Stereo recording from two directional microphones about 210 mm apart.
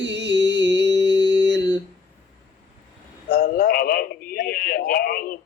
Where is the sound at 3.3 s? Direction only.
45° left (ahead or behind).